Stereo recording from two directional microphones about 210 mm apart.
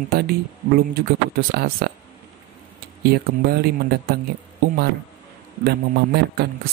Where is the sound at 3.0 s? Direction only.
50° right (ahead or behind).